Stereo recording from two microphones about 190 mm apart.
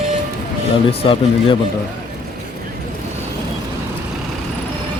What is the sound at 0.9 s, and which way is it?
Speech, 30° left (ahead or behind).